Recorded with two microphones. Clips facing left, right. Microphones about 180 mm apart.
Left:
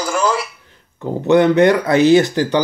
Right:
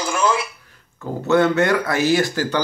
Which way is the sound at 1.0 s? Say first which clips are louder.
Left 4 dB; 15° left (ahead or behind).